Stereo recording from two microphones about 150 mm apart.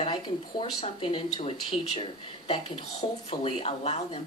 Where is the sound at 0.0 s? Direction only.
30° left (ahead or behind).